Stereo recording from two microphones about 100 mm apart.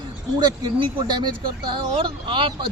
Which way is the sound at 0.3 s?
45° right (ahead or behind).